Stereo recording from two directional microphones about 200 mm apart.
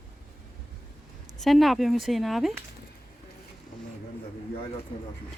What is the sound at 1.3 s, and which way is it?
Speech, centre (ahead or behind).